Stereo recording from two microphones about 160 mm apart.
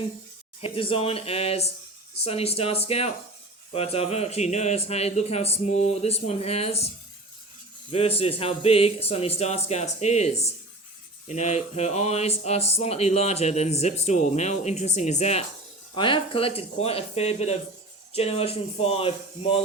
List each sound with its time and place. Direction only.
0.6 s speech: 35° left (ahead or behind)
16.0 s speech: 30° left (ahead or behind)